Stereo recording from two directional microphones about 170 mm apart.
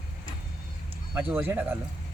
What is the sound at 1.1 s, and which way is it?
Speech, 10° right (ahead or behind).